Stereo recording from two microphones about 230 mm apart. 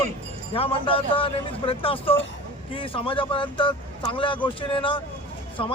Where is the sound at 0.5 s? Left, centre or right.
Left.